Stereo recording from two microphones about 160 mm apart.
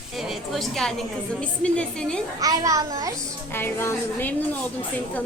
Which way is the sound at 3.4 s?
15° left (ahead or behind).